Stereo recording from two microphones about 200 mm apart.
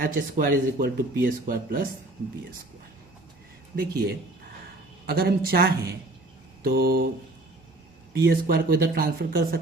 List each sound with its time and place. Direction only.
0.0 s speech: 45° right (ahead or behind)
3.8 s speech: 50° right (ahead or behind)
8.1 s speech: 50° right (ahead or behind)